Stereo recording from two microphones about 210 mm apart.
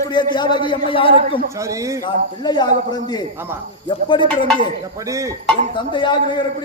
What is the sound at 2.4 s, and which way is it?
Speech, 20° left (ahead or behind).